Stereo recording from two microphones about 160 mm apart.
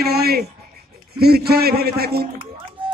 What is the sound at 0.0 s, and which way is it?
A man's voice, 80° right.